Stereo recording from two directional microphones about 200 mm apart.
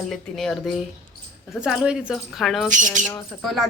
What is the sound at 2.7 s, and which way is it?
Speech, 40° right (ahead or behind).